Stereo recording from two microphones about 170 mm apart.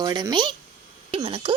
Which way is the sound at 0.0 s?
25° right (ahead or behind).